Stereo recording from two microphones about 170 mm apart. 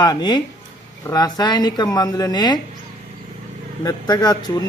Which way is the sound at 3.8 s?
25° left (ahead or behind).